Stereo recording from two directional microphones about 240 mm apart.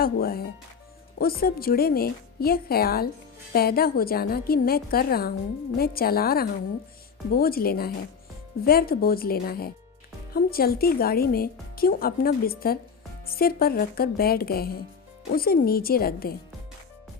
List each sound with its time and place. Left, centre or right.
0.0 s speech: left